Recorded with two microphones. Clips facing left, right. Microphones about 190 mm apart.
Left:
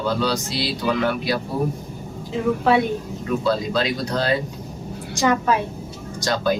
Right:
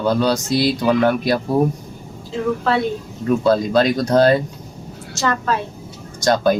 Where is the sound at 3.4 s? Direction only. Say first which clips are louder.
Right 6 dB; 45° right (ahead or behind).